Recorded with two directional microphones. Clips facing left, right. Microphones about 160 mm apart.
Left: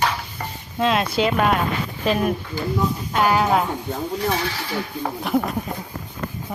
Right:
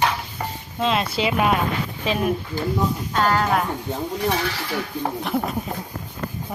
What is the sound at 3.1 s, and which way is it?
Speech, 10° left (ahead or behind).